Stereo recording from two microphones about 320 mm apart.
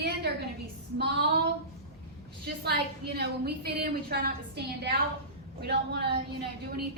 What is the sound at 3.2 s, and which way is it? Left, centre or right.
A woman's voice, right.